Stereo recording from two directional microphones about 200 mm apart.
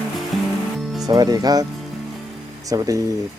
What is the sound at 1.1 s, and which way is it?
Speech, 20° right (ahead or behind).